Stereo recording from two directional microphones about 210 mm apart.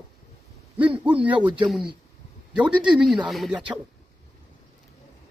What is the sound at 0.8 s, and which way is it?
Speech, 5° right (ahead or behind).